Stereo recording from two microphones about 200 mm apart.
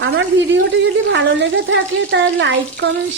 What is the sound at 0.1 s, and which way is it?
A woman's voice, 65° right (ahead or behind).